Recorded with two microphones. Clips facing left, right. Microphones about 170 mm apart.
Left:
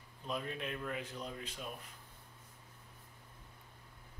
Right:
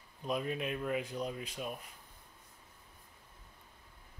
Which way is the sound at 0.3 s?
10° right (ahead or behind).